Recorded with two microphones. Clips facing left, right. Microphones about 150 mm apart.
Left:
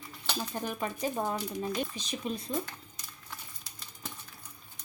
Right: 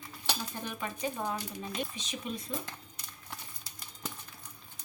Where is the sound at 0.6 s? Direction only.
40° left (ahead or behind).